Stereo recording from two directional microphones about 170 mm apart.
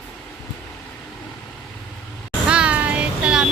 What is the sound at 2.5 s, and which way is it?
Child singing, 5° right (ahead or behind).